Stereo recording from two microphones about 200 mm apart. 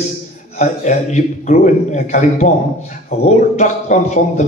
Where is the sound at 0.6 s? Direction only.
35° left (ahead or behind).